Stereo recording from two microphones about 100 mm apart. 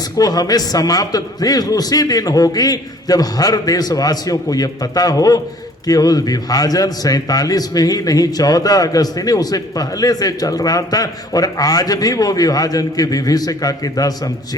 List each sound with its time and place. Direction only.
0.2 s a man's voice: 40° left (ahead or behind)